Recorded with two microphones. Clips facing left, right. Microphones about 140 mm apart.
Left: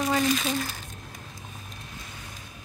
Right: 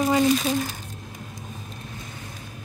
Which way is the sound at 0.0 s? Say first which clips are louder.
Right 5 dB; 15° right (ahead or behind).